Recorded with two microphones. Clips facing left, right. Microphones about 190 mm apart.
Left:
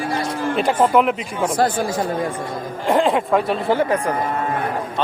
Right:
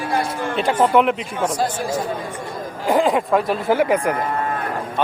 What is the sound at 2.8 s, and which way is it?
Speech, centre (ahead or behind).